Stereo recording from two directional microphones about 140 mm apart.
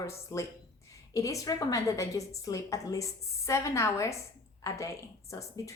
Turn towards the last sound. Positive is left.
turn(degrees=20)  # may be behind; listen again after turning